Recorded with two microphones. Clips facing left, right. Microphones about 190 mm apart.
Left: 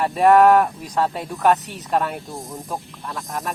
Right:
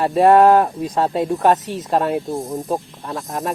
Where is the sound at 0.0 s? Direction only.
30° right (ahead or behind).